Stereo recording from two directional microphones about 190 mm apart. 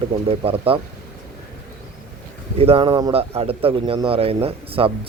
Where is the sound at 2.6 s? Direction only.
30° right (ahead or behind).